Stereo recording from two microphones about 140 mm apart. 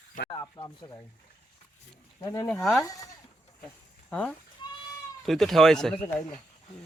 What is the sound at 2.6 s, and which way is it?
Speech, centre (ahead or behind).